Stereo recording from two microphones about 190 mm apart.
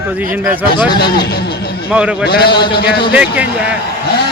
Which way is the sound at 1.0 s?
60° left (ahead or behind).